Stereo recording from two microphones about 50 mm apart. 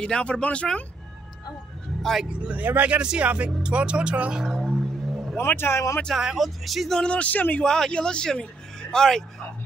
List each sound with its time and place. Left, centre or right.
0.0 s speech: left
2.2 s speech: right
2.6 s speech: right
3.0 s speech: right
4.4 s a sound: centre
5.4 s speech: left
6.1 s speech: centre
6.9 s speech: left
7.6 s speech: centre